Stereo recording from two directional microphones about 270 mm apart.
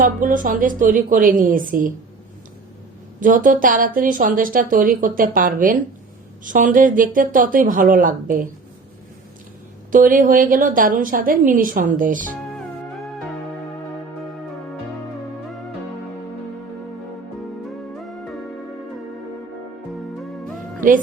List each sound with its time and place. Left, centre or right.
0.0 s a woman's voice: right
3.2 s a woman's voice: right
9.9 s a woman's voice: right
17.9 s music: centre
20.8 s a woman's voice: right